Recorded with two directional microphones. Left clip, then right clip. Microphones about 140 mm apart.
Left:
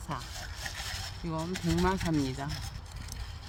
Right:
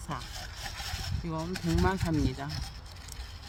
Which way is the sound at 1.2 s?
Centre (ahead or behind).